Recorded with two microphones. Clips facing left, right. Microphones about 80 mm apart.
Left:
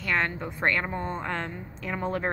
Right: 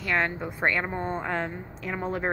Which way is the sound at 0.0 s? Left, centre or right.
Centre.